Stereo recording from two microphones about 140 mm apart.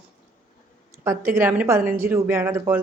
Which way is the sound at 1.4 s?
15° right (ahead or behind).